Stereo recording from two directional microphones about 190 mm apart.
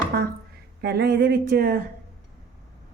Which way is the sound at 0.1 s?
60° right (ahead or behind).